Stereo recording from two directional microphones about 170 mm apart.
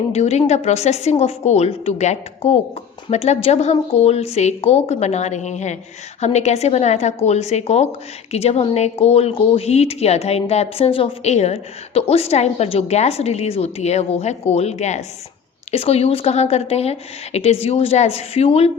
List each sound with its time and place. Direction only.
0.1 s speech: 40° left (ahead or behind)